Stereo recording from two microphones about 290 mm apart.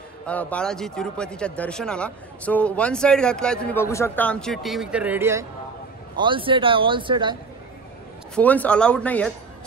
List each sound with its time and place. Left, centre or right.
0.3 s speech: centre
8.4 s speech: centre